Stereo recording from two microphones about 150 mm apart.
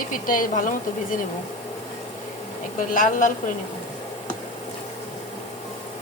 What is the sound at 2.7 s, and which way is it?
Speech, 65° left (ahead or behind).